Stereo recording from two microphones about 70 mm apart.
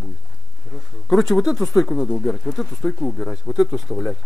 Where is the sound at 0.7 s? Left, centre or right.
Centre.